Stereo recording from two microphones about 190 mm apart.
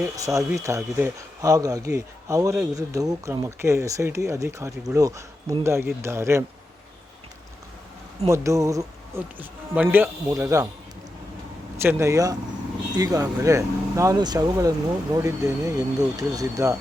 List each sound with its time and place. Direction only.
0.2 s speech: 15° right (ahead or behind)
8.3 s speech: 15° right (ahead or behind)
11.8 s speech: 15° right (ahead or behind)